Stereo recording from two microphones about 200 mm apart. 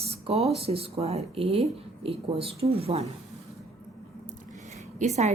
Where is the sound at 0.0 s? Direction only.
30° right (ahead or behind).